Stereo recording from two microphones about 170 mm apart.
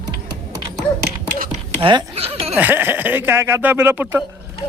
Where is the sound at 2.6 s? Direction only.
10° right (ahead or behind).